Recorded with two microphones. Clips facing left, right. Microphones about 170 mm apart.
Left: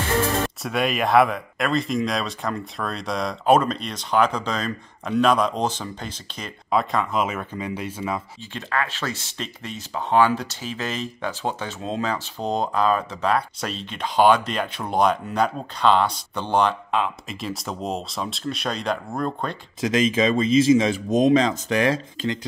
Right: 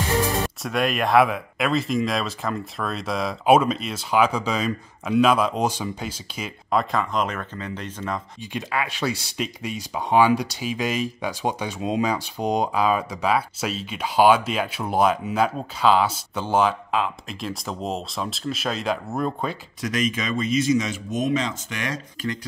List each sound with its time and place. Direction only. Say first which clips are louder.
0.2 s music: left 1 dB; 15° right (ahead or behind)
0.6 s speech: even; centre (ahead or behind)
8.4 s speech: even; 15° right (ahead or behind)
19.8 s speech: left 6 dB; 25° left (ahead or behind)